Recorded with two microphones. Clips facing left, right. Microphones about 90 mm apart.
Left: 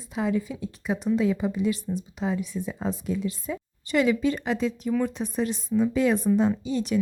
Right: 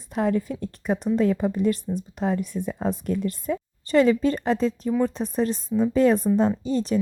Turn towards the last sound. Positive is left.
turn(degrees=-35)  # may be behind; listen again after turning